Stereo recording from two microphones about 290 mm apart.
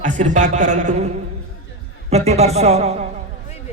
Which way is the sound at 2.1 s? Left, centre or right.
Right.